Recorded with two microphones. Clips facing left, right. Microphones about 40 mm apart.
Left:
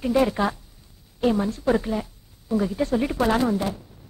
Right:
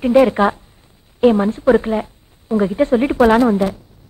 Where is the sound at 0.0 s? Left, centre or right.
Right.